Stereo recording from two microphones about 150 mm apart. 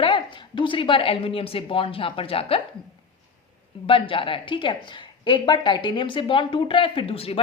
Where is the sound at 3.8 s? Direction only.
35° left (ahead or behind).